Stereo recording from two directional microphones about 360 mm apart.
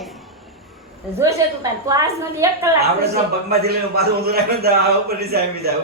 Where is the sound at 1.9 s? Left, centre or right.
Centre.